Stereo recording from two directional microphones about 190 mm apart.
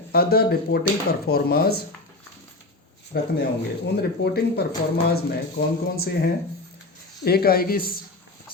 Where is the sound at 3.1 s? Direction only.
60° left (ahead or behind).